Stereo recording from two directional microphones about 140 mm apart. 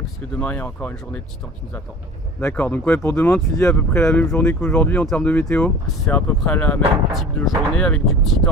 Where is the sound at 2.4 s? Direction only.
15° left (ahead or behind).